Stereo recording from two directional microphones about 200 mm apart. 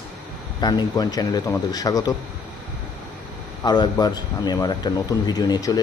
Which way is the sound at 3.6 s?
20° left (ahead or behind).